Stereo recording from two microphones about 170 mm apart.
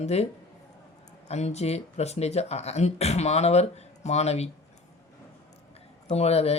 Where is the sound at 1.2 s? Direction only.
40° left (ahead or behind).